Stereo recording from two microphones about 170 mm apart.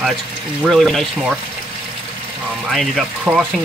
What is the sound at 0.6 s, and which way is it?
Speech, centre (ahead or behind).